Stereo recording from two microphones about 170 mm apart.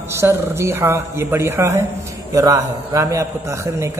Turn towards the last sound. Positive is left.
turn(degrees=-15)  # may be behind; listen again after turning